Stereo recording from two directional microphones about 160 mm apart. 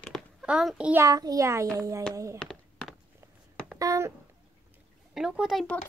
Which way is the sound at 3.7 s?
20° right (ahead or behind).